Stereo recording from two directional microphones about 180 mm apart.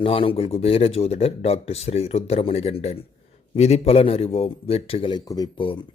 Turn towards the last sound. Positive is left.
turn(degrees=25)  # may be behind; listen again after turning